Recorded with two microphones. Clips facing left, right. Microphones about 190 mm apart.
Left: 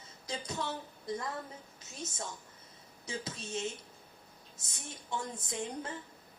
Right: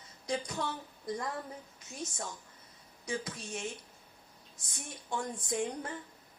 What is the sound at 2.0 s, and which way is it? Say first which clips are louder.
Speech: right 1 dB; 25° left (ahead or behind).